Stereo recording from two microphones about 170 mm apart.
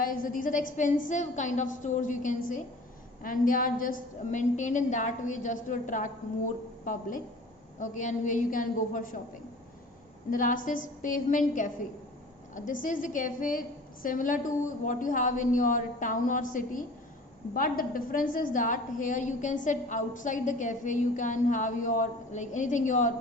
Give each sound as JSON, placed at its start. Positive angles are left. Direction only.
{"t": 0.0, "sound": "a woman's voice", "side_deg": 55}
{"t": 10.3, "sound": "a woman's voice", "side_deg": 50}